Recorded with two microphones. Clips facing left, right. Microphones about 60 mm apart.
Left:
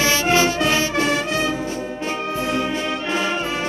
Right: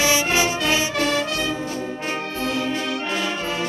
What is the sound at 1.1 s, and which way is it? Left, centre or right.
Music, left.